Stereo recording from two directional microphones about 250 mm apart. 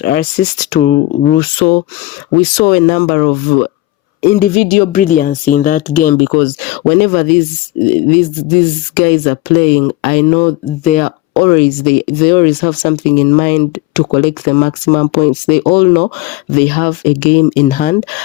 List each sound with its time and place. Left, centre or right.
0.0 s speech: left